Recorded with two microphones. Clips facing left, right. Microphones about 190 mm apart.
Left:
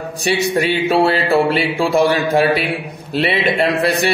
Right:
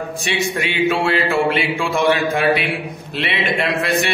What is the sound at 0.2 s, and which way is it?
A man's voice, 35° left (ahead or behind).